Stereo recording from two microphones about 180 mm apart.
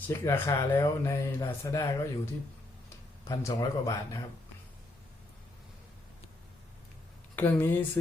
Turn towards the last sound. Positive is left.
turn(degrees=10)  # may be behind; listen again after turning